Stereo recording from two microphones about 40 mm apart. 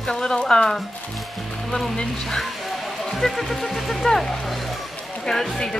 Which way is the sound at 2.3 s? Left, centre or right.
Centre.